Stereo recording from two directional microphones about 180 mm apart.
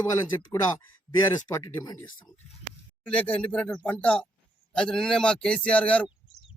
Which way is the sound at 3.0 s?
5° left (ahead or behind).